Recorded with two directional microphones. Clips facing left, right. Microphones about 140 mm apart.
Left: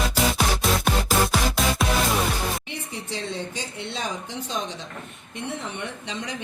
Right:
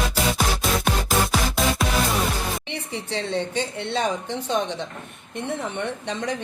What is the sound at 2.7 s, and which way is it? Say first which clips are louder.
A woman's voice: right 4 dB; 65° right (ahead or behind).